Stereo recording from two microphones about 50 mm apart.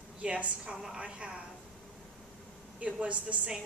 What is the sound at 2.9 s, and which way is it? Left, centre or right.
Speech, right.